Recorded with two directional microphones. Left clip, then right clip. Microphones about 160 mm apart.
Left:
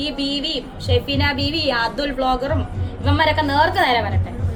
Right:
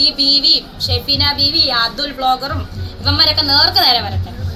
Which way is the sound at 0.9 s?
10° left (ahead or behind).